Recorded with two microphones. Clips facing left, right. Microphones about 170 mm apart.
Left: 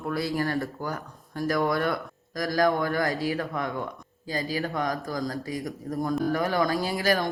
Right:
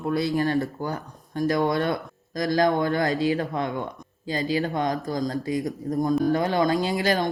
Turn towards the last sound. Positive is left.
turn(degrees=-25)  # may be behind; listen again after turning